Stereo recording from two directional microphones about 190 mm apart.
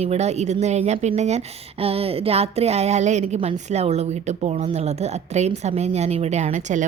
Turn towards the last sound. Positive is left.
turn(degrees=-40)  # may be behind; listen again after turning